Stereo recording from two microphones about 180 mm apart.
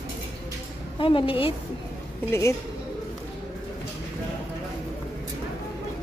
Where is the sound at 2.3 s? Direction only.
15° left (ahead or behind).